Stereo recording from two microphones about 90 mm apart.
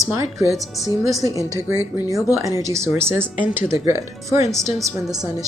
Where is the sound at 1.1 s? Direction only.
40° right (ahead or behind).